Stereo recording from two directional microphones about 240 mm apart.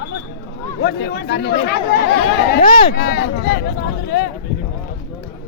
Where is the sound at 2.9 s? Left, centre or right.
Left.